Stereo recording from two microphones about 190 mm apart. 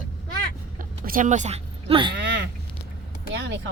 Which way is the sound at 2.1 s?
65° right (ahead or behind).